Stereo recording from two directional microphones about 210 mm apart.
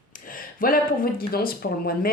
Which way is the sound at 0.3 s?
40° left (ahead or behind).